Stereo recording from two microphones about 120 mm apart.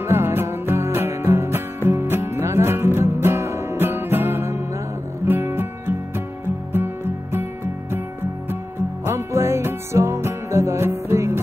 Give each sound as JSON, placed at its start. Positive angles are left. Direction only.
{"t": 0.0, "sound": "music", "side_deg": -20}
{"t": 7.3, "sound": "music", "side_deg": -20}
{"t": 9.0, "sound": "music", "side_deg": -20}